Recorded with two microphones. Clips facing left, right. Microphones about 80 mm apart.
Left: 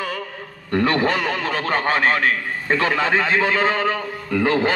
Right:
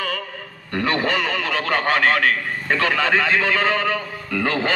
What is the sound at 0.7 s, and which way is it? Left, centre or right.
A man's voice, left.